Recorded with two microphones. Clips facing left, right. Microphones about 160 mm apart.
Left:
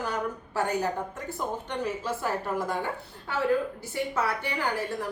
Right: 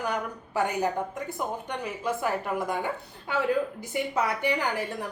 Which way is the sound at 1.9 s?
15° right (ahead or behind).